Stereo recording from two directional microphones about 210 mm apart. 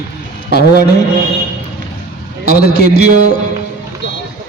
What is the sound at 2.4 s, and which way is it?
Speech, 50° left (ahead or behind).